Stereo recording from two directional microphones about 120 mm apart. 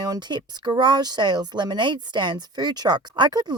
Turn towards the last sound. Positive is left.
turn(degrees=-35)  # may be behind; listen again after turning